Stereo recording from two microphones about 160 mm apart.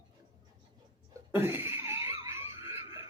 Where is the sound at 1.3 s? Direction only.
15° right (ahead or behind).